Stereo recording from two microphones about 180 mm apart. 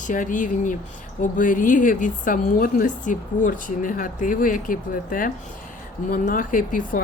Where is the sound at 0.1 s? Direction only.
45° left (ahead or behind).